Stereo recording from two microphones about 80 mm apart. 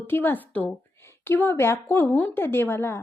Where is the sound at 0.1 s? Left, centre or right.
Left.